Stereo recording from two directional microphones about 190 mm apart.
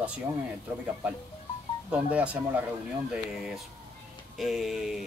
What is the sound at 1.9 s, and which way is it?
Speech, 5° right (ahead or behind).